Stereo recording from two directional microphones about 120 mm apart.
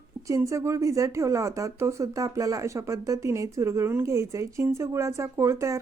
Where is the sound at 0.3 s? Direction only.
25° right (ahead or behind).